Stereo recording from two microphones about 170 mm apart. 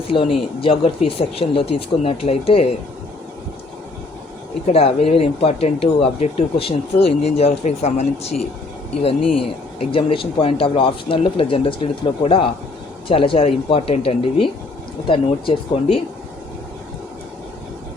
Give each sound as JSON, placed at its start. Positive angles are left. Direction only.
{"t": 0.1, "sound": "speech", "side_deg": 30}
{"t": 4.6, "sound": "speech", "side_deg": 35}
{"t": 9.9, "sound": "speech", "side_deg": 30}